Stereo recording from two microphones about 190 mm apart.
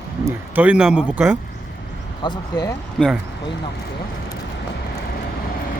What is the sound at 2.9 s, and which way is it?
Speech, centre (ahead or behind).